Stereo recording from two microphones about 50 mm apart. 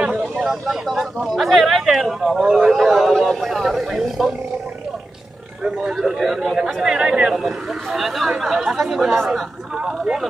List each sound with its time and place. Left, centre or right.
0.0 s speech: centre
2.4 s speech: centre
2.7 s speech: centre
5.6 s speech: centre
7.3 s speech: centre
9.8 s speech: centre